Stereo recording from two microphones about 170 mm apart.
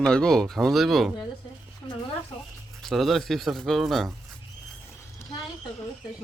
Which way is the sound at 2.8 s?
Centre (ahead or behind).